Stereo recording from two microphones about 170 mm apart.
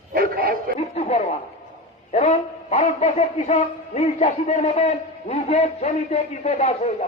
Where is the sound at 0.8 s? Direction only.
40° left (ahead or behind).